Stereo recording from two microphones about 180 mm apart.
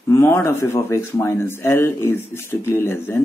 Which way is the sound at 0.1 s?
15° left (ahead or behind).